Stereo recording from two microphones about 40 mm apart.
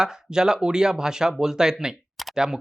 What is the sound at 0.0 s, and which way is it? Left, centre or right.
Speech, centre.